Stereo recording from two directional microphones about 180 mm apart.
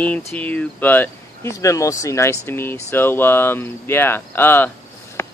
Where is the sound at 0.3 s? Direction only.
10° left (ahead or behind).